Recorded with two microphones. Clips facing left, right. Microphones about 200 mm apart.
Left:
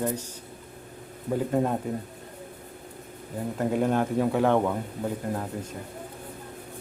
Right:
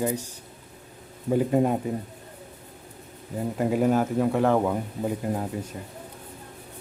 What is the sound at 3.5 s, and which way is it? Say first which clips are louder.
Speech: right 2 dB; 5° right (ahead or behind).